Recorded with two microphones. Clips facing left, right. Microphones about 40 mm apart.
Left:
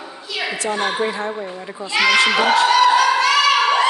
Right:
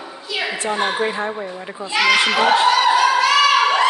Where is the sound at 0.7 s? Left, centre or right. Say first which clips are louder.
Right 1 dB; centre.